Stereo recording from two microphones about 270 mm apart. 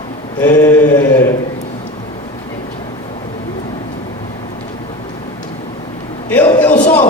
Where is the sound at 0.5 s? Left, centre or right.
Centre.